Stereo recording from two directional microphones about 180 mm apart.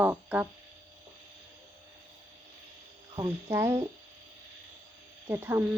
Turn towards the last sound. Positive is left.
turn(degrees=-10)  # may be behind; listen again after turning